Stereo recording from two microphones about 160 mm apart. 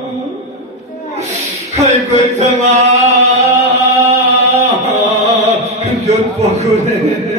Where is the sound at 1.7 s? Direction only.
40° right (ahead or behind).